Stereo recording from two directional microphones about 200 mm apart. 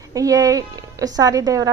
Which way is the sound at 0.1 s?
15° right (ahead or behind).